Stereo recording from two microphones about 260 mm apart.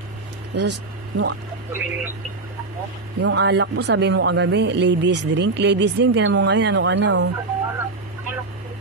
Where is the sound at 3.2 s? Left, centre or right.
Right.